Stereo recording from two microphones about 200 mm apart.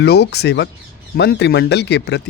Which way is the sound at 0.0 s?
55° left (ahead or behind).